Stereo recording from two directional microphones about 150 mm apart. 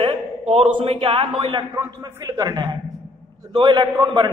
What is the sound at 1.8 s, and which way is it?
A man's voice, 20° right (ahead or behind).